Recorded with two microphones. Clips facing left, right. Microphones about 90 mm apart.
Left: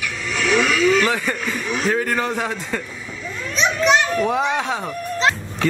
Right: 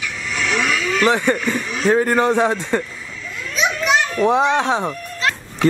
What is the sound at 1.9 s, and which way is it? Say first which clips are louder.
Speech: right 8 dB; 30° right (ahead or behind).